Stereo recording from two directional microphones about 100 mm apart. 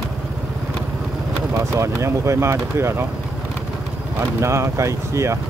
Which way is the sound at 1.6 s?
30° right (ahead or behind).